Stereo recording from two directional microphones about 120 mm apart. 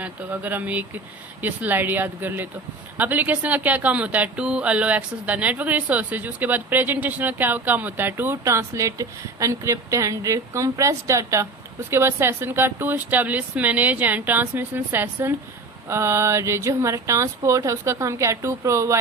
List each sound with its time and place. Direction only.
0.0 s speech: 15° right (ahead or behind)